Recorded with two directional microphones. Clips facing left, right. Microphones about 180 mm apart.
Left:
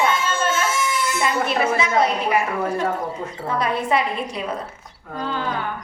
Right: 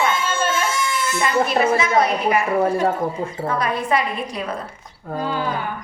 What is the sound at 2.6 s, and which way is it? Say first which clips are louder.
Speech: right 4 dB; 30° right (ahead or behind).